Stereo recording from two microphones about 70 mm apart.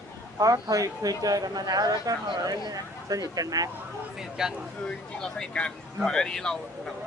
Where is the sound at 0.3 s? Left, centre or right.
Right.